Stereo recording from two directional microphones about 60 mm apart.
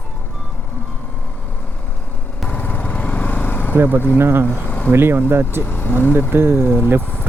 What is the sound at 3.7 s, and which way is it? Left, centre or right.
Speech, right.